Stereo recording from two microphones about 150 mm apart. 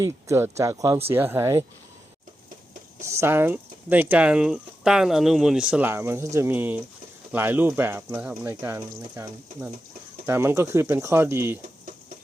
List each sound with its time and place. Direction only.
0.0 s speech: 15° right (ahead or behind)
3.0 s speech: 20° right (ahead or behind)
10.2 s speech: 15° right (ahead or behind)